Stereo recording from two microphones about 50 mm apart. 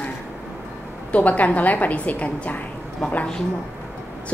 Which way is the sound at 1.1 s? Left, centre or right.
Left.